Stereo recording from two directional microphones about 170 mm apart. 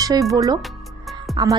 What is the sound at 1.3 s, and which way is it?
Speech, 20° right (ahead or behind).